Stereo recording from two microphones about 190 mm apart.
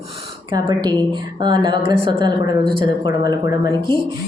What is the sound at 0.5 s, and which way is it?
Speech, 20° right (ahead or behind).